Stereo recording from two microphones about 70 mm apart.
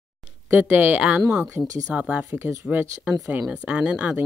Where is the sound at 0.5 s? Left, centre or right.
Right.